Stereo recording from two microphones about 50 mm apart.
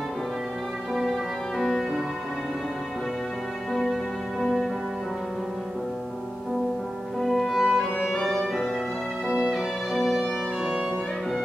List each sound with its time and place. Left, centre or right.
0.9 s music: centre
3.7 s music: centre
7.2 s music: centre
7.5 s music: centre
8.1 s music: centre
10.6 s music: right